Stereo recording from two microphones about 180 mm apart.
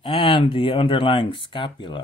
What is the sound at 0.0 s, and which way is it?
Speech, 25° left (ahead or behind).